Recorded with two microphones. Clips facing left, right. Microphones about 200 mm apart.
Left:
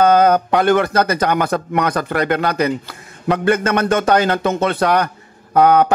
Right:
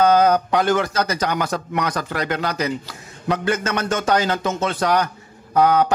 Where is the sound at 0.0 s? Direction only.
55° left (ahead or behind).